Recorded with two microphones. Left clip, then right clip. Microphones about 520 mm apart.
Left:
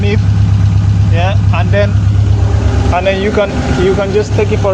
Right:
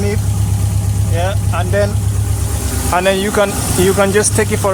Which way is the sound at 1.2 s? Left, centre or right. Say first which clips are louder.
Left 2 dB; right.